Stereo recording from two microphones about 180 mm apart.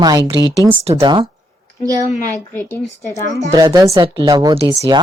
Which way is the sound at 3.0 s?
15° left (ahead or behind).